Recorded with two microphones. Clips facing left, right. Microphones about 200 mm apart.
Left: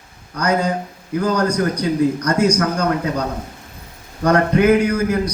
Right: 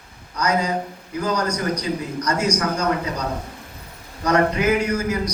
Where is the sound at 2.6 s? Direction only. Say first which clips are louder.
Left 3 dB; 55° left (ahead or behind).